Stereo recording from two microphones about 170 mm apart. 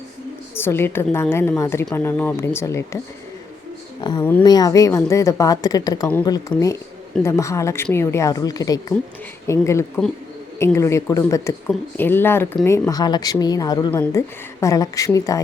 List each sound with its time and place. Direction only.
0.5 s a woman's voice: 15° left (ahead or behind)
4.2 s a woman's voice: 10° left (ahead or behind)
4.4 s a woman's voice: 20° left (ahead or behind)